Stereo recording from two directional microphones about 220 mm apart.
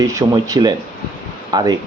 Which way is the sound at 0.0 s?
15° right (ahead or behind).